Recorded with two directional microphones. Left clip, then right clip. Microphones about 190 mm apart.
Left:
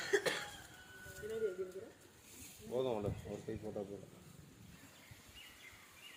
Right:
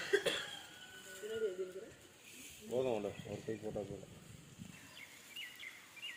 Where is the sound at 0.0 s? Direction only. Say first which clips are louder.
Even; 10° right (ahead or behind).